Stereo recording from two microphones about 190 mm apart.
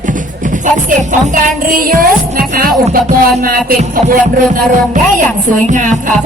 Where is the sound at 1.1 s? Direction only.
45° right (ahead or behind).